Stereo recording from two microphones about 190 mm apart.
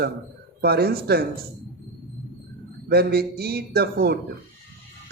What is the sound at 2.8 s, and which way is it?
Speech, 55° right (ahead or behind).